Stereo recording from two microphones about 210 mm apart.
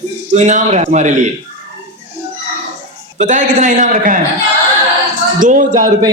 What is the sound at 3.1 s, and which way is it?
A man's voice, 35° right (ahead or behind).